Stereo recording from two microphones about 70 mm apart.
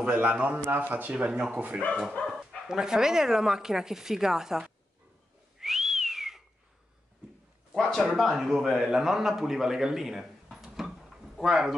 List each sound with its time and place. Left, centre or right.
0.0 s speech: right; by 4.7 s centre
5.6 s whistling: centre
7.7 s a man's voice: centre